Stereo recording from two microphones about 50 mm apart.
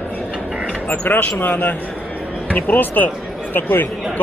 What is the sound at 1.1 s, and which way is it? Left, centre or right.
Speech, left.